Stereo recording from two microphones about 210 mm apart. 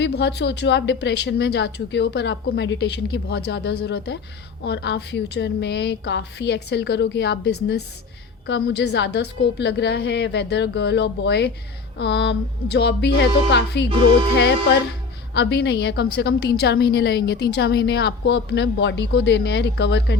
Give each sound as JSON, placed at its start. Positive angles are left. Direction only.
{"t": 0.0, "sound": "a woman's voice", "side_deg": 55}
{"t": 15.4, "sound": "a woman's voice", "side_deg": 55}